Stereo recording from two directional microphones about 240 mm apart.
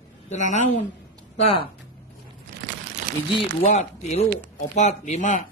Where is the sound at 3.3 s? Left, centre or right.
Left.